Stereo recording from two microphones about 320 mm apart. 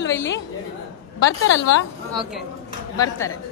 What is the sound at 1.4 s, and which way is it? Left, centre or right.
Speech, left.